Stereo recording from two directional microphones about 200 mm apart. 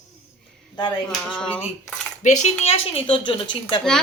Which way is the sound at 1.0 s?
5° left (ahead or behind).